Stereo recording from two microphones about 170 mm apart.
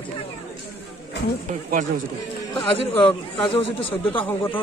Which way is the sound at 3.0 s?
30° left (ahead or behind).